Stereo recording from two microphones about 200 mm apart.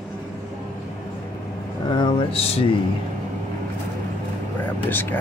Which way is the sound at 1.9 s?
25° left (ahead or behind).